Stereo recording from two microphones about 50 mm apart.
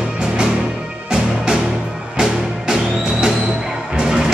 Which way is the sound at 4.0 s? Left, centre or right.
Centre.